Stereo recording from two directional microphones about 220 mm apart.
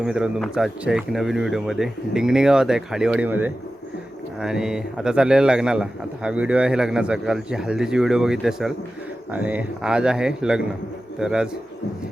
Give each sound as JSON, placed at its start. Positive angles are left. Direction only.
{"t": 0.0, "sound": "a man's voice", "side_deg": -5}